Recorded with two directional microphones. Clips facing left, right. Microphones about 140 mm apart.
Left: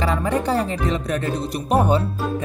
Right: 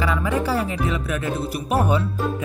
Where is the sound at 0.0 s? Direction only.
35° left (ahead or behind).